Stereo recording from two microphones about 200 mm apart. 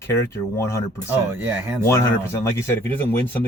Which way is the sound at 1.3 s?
10° right (ahead or behind).